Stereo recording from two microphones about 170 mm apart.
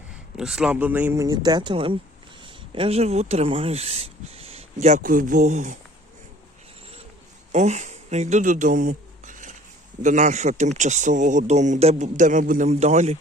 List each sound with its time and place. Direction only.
0.3 s speech: 5° right (ahead or behind); by 5.7 s 45° right (ahead or behind)
7.5 s a sound: 40° right (ahead or behind)
10.0 s speech: 45° right (ahead or behind)